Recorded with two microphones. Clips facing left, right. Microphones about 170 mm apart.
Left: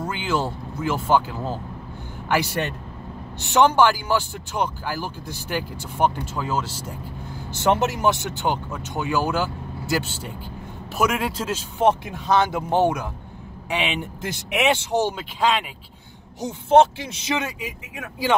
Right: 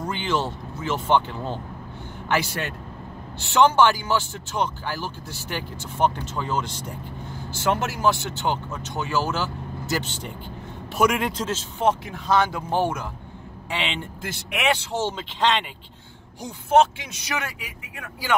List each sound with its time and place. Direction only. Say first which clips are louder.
0.0 s speech: left 1 dB; 5° left (ahead or behind)
3.3 s speech: left 1 dB; 15° left (ahead or behind)
7.5 s speech: left 4 dB; 20° left (ahead or behind)
11.8 s speech: left 3 dB; 20° left (ahead or behind)
17.1 s speech: left 5 dB; 25° left (ahead or behind)